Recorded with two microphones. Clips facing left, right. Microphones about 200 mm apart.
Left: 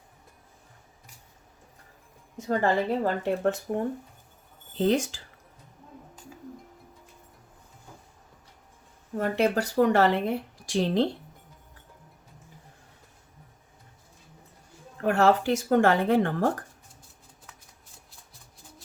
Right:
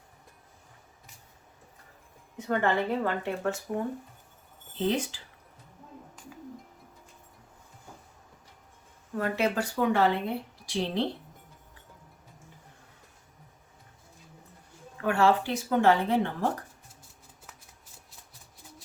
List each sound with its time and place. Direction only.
2.5 s speech: 35° left (ahead or behind)
4.8 s speech: 45° left (ahead or behind)
9.1 s speech: 35° left (ahead or behind)
9.8 s speech: 75° left (ahead or behind)
10.7 s speech: 45° left (ahead or behind)
15.1 s speech: 40° left (ahead or behind)